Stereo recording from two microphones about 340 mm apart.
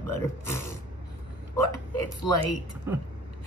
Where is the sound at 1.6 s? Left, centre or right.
Left.